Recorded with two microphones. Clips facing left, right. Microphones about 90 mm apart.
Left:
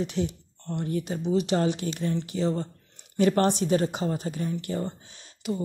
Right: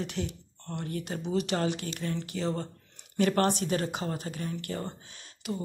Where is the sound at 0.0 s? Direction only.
25° left (ahead or behind).